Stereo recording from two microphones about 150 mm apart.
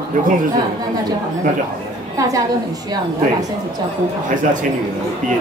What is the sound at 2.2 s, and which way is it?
Speech, 20° right (ahead or behind).